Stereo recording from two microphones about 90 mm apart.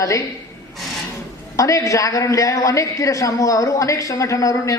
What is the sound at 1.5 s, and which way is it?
A man's voice, 35° left (ahead or behind).